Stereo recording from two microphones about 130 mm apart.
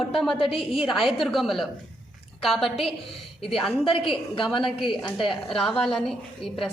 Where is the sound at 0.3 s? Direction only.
45° left (ahead or behind).